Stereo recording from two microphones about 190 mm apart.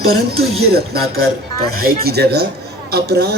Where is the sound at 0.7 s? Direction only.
55° right (ahead or behind).